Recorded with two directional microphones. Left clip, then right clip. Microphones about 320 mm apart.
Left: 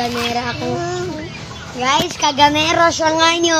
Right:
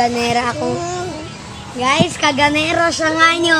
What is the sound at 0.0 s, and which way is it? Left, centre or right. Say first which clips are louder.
Speech: right 4 dB; right.